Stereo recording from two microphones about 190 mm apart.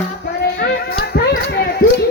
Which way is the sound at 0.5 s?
55° left (ahead or behind).